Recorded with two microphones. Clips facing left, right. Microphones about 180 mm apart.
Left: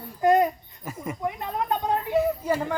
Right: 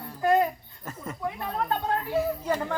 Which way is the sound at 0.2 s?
20° left (ahead or behind).